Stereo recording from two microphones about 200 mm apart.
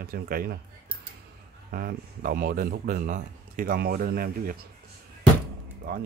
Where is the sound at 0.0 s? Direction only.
50° right (ahead or behind).